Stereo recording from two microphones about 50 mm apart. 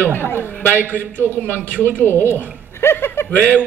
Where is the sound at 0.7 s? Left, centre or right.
Right.